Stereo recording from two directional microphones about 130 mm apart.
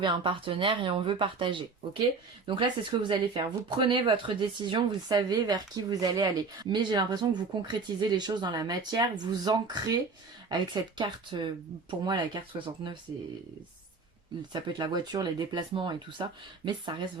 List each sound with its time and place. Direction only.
0.0 s speech: 40° right (ahead or behind)
14.5 s speech: 35° right (ahead or behind)